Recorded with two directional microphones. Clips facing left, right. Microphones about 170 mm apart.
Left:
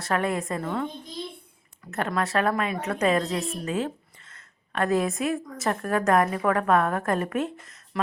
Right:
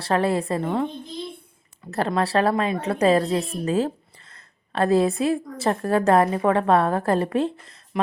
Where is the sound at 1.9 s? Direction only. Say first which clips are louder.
Right 4 dB; 30° right (ahead or behind).